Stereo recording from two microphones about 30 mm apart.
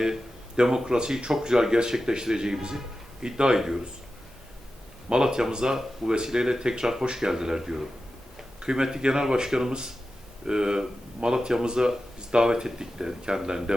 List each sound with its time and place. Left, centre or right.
0.0 s speech: right
5.0 s speech: right